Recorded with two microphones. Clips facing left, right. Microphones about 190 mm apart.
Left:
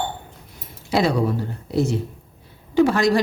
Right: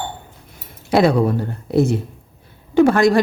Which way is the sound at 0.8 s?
55° right (ahead or behind).